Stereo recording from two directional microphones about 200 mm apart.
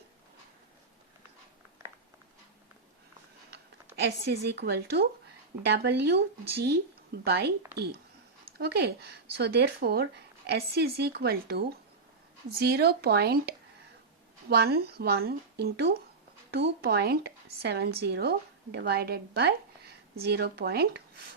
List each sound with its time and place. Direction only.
4.3 s speech: 55° right (ahead or behind)
8.5 s speech: 55° right (ahead or behind)